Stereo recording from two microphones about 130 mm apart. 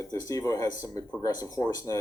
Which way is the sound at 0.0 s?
25° left (ahead or behind).